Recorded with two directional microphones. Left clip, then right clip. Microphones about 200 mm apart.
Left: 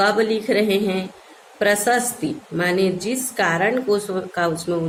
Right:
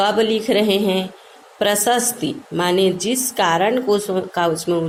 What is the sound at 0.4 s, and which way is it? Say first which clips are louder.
A woman's voice: right 2 dB; 20° right (ahead or behind).